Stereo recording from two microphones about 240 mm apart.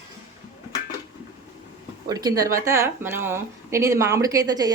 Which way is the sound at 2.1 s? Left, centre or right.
Centre.